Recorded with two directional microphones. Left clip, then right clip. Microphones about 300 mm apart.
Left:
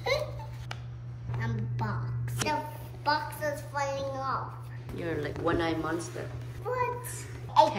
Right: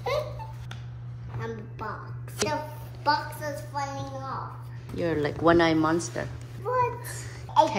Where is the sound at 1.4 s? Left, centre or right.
Centre.